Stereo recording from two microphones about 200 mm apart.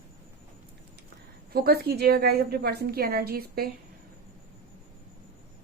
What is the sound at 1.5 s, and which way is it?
A woman's voice, 50° right (ahead or behind).